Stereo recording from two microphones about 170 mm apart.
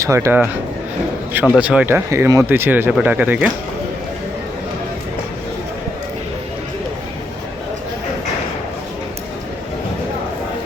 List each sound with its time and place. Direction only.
0.0 s speech: 15° right (ahead or behind)
1.5 s speech: 5° right (ahead or behind)